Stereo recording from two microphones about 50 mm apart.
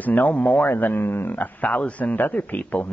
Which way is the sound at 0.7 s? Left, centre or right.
Left.